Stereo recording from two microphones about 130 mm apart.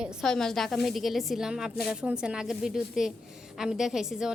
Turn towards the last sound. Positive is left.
turn(degrees=-5)  # may be behind; listen again after turning